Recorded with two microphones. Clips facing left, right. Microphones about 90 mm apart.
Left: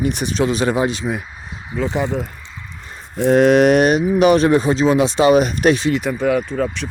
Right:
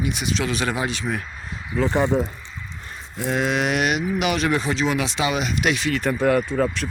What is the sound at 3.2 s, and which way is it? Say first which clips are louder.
Speech: left 11 dB; 50° left (ahead or behind).